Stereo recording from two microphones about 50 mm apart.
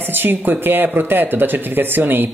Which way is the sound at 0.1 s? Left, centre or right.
Right.